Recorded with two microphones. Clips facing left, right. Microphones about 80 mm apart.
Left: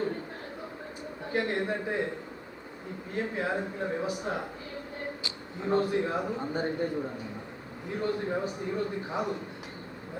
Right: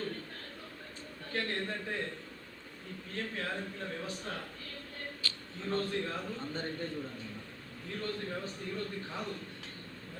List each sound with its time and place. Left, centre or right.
1.2 s speech: centre
3.2 s speech: centre